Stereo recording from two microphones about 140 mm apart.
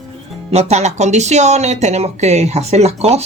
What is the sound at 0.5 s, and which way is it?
Speech, 55° right (ahead or behind).